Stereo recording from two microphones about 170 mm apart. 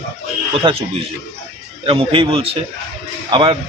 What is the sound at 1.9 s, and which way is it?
A man's voice, 35° right (ahead or behind).